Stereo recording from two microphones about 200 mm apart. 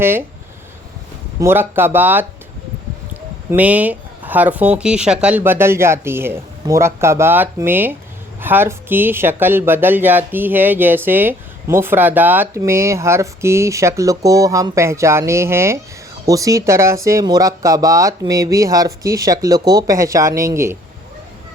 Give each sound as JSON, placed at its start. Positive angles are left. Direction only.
{"t": 0.0, "sound": "speech", "side_deg": -10}
{"t": 1.4, "sound": "speech", "side_deg": -10}
{"t": 3.5, "sound": "speech", "side_deg": -5}